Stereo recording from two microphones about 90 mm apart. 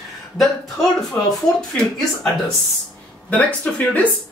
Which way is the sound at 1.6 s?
5° left (ahead or behind).